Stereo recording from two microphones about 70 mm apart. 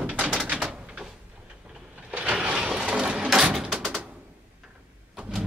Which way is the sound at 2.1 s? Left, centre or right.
Centre.